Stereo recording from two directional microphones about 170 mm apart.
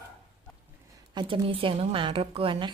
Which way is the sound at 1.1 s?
30° right (ahead or behind).